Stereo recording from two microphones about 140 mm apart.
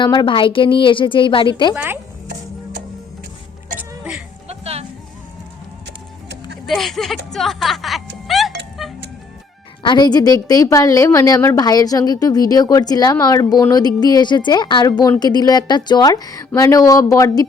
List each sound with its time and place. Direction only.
0.0 s a woman's voice: 30° left (ahead or behind)
1.7 s speech: 10° right (ahead or behind)
3.8 s music: 10° right (ahead or behind)
4.4 s music: 45° right (ahead or behind)
6.7 s speech: centre (ahead or behind)
7.3 s music: centre (ahead or behind)
9.8 s a woman's voice: 30° left (ahead or behind)